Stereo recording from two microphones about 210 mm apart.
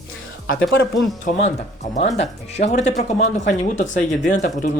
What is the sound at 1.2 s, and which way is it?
Speech, 30° left (ahead or behind).